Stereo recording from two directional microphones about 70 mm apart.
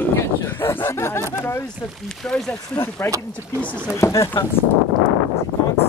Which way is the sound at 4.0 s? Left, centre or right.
Left.